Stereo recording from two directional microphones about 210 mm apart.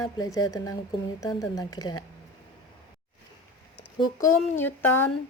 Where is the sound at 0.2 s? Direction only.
15° left (ahead or behind).